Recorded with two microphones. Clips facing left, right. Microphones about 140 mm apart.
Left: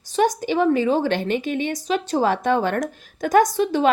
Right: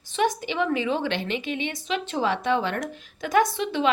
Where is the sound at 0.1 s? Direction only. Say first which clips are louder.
Left 5 dB; 40° left (ahead or behind).